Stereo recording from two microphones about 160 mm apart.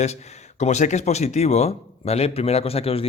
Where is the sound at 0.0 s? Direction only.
45° left (ahead or behind).